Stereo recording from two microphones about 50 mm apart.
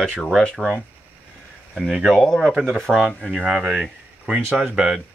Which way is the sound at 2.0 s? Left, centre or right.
Centre.